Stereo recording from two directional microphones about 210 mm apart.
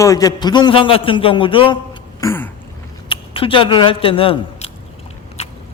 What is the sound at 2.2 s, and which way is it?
Speech, 10° left (ahead or behind).